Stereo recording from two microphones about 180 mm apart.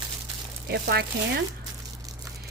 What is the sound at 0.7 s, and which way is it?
Speech, 65° right (ahead or behind).